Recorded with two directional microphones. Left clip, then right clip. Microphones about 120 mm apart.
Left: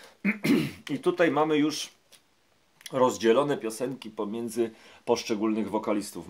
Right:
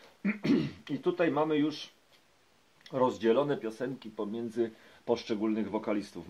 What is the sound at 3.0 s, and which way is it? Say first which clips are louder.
Speech: left 4 dB; 20° left (ahead or behind).